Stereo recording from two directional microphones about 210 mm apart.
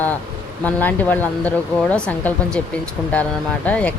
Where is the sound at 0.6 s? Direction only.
10° left (ahead or behind).